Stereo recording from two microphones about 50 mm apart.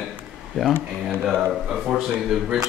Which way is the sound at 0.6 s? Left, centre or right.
Centre.